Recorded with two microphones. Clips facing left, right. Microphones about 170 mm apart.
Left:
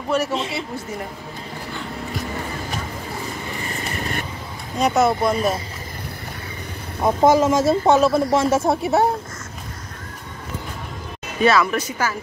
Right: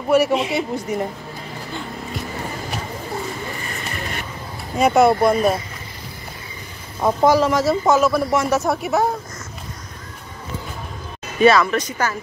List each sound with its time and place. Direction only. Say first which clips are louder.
0.1 s speech: right 6 dB; 10° right (ahead or behind)
4.7 s speech: right 4 dB; 5° right (ahead or behind)
7.0 s speech: even; 20° left (ahead or behind)
11.4 s speech: right 3 dB; 5° left (ahead or behind)